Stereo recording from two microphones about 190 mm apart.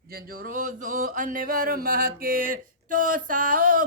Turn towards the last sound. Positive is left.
turn(degrees=-45)  # may be behind; listen again after turning